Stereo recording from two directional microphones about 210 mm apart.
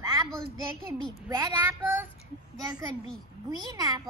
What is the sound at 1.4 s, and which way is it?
Child singing, 10° right (ahead or behind).